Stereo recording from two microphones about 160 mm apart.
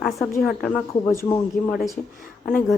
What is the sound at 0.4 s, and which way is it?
Speech, 5° left (ahead or behind).